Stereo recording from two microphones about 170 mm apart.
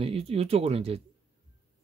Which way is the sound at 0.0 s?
35° right (ahead or behind).